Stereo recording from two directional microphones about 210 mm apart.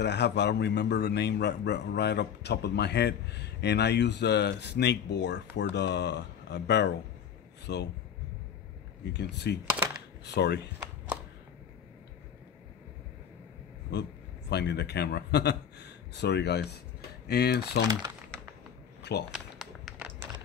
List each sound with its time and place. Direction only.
0.0 s a man's voice: 55° left (ahead or behind)
9.1 s a man's voice: 55° left (ahead or behind)
13.9 s a man's voice: 55° left (ahead or behind)
19.3 s a sound: centre (ahead or behind)